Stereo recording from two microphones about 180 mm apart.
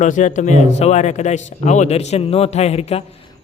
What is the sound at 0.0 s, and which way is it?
Speech, 40° left (ahead or behind).